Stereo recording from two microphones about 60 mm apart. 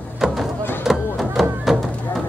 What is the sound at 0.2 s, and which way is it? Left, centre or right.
Music, centre.